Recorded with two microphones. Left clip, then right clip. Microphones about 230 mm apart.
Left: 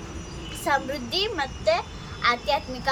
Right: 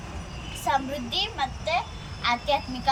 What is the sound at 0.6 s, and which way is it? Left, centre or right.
A child's voice, centre.